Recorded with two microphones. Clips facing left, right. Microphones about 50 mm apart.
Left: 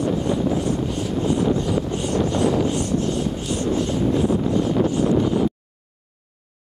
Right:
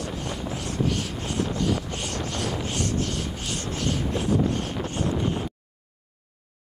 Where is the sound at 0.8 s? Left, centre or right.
Right.